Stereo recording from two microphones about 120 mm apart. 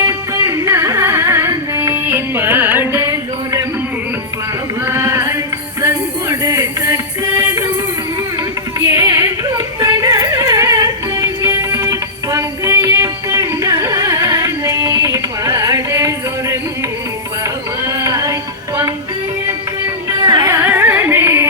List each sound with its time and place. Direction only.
0.0 s music: 25° right (ahead or behind)
4.9 s a sound: 25° right (ahead or behind)
5.8 s music: 25° right (ahead or behind)
8.9 s a sound: 30° right (ahead or behind)
17.4 s music: 25° right (ahead or behind)
20.2 s carnatic music: 35° right (ahead or behind)
20.5 s carnatic music: 20° right (ahead or behind)